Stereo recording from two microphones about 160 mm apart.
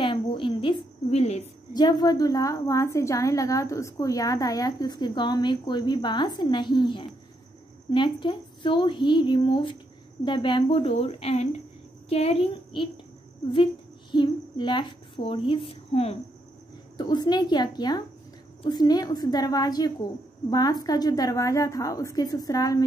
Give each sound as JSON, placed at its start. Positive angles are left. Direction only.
{"t": 0.0, "sound": "cricket", "side_deg": 30}
{"t": 1.2, "sound": "a sound", "side_deg": 40}
{"t": 1.7, "sound": "a woman's voice", "side_deg": 25}
{"t": 14.1, "sound": "a woman's voice", "side_deg": 30}
{"t": 16.9, "sound": "a woman's voice", "side_deg": 25}